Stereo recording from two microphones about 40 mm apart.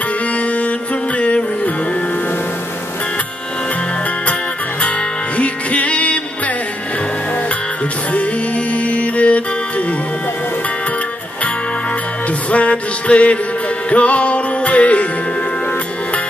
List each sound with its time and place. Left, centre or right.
1.1 s music: left
5.4 s music: left
8.7 s music: left
12.4 s music: left